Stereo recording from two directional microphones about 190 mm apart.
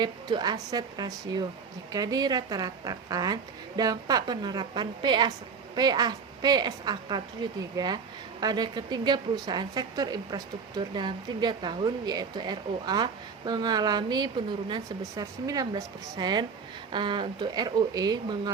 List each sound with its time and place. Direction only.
0.0 s a woman's voice: 20° right (ahead or behind)